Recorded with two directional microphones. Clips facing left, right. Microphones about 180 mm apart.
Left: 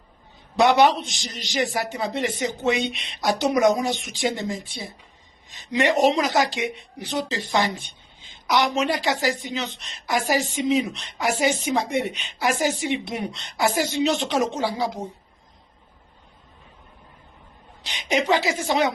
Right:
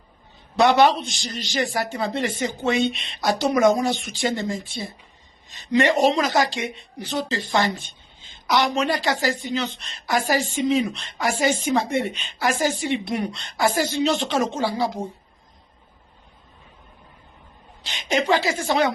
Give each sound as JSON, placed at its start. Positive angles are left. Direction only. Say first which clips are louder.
{"t": 0.5, "sound": "a woman's voice", "louder": "right 1 dB", "side_deg": 20}
{"t": 17.8, "sound": "a woman's voice", "louder": "even", "side_deg": 20}